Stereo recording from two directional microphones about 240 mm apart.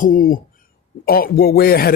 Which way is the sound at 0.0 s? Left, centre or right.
Left.